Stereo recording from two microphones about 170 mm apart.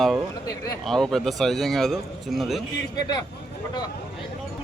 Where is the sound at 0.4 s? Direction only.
20° left (ahead or behind).